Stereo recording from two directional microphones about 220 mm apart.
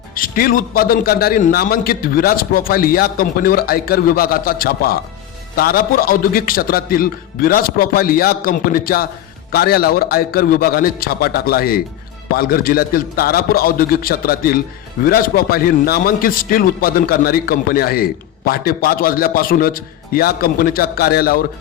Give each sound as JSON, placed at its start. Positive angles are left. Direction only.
{"t": 0.1, "sound": "a man's voice", "side_deg": 40}